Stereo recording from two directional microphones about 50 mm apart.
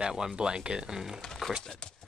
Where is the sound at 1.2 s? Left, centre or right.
Centre.